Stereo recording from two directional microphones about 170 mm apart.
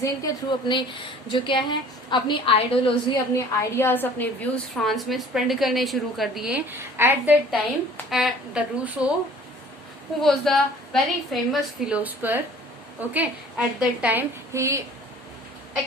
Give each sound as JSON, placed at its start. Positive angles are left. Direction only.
{"t": 0.7, "sound": "speech", "side_deg": 30}
{"t": 2.9, "sound": "a woman's voice", "side_deg": 15}
{"t": 10.2, "sound": "a woman's voice", "side_deg": 0}